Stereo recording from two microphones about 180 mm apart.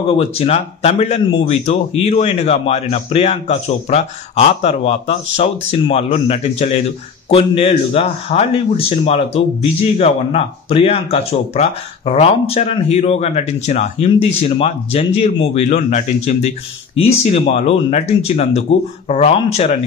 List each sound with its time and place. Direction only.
0.2 s speech: 35° left (ahead or behind)